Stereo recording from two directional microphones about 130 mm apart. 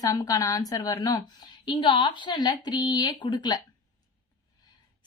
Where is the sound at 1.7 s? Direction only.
40° left (ahead or behind).